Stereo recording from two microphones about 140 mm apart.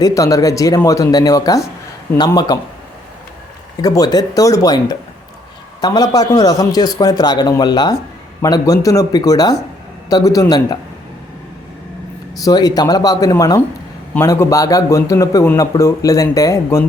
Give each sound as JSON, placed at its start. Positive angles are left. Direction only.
{"t": 0.0, "sound": "a man's voice", "side_deg": 25}
{"t": 3.8, "sound": "a man's voice", "side_deg": 25}
{"t": 12.4, "sound": "a man's voice", "side_deg": 25}